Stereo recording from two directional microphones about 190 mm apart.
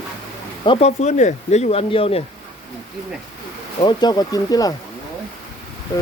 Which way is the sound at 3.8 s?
25° left (ahead or behind).